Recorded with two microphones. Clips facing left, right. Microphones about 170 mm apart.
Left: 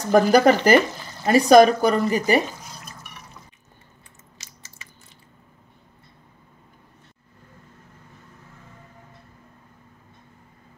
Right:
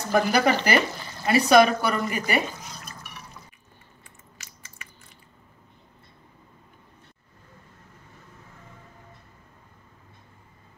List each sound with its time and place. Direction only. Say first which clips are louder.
0.1 s speech: left 6 dB; 45° left (ahead or behind)